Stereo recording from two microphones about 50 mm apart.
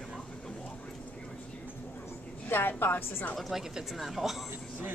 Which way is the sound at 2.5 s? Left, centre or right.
Left.